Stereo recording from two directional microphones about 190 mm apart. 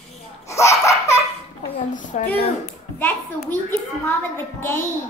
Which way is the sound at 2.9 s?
10° left (ahead or behind).